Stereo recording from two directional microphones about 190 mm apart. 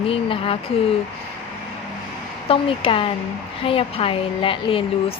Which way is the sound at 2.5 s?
30° left (ahead or behind).